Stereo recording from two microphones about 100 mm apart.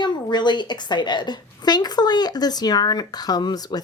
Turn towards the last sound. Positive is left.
turn(degrees=40)  # may be behind; listen again after turning